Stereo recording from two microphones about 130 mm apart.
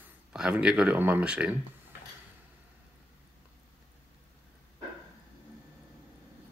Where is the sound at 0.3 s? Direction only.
5° right (ahead or behind).